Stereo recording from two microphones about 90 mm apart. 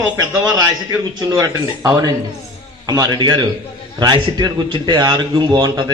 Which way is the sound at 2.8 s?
50° right (ahead or behind).